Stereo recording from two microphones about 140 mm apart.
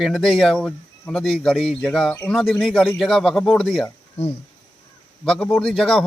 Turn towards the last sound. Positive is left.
turn(degrees=5)  # may be behind; listen again after turning